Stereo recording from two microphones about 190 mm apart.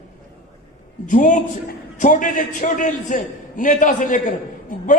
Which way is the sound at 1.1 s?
40° left (ahead or behind).